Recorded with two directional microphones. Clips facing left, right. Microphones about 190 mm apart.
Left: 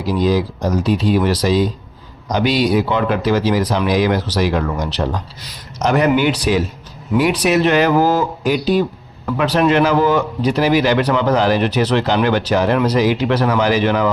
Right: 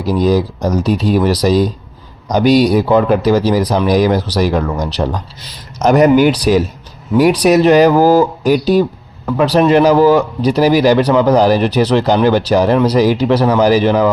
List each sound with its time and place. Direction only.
0.0 s speech: 45° right (ahead or behind)